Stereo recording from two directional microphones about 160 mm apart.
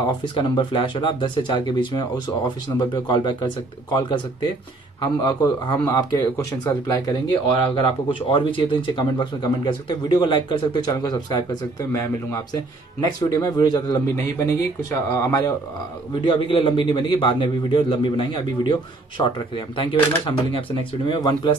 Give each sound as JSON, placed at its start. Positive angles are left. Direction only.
{"t": 0.0, "sound": "speech", "side_deg": 30}
{"t": 8.3, "sound": "a man's voice", "side_deg": 30}
{"t": 16.2, "sound": "a man's voice", "side_deg": 35}